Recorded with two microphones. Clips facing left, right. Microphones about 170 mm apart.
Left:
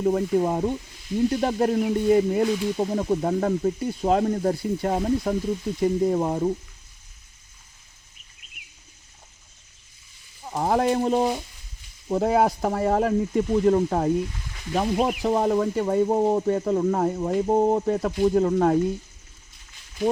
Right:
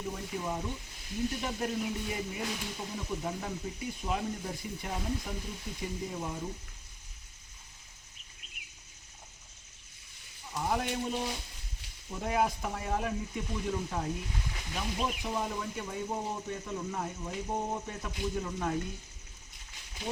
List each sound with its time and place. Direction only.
0.0 s speech: 60° left (ahead or behind)
10.4 s speech: 60° left (ahead or behind)